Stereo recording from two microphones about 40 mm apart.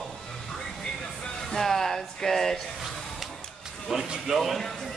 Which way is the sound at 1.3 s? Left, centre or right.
Centre.